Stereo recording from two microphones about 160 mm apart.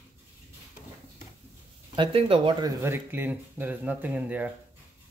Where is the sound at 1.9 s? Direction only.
35° right (ahead or behind).